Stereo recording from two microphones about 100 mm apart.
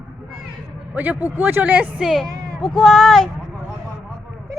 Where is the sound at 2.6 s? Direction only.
Centre (ahead or behind).